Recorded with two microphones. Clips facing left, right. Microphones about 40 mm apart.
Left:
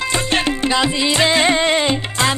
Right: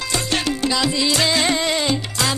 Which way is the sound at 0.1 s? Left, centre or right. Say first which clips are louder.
Left 2 dB; left.